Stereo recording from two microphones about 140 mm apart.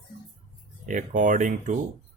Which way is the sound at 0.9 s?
65° right (ahead or behind).